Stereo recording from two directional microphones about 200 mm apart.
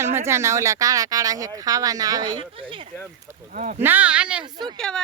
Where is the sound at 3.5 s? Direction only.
40° right (ahead or behind).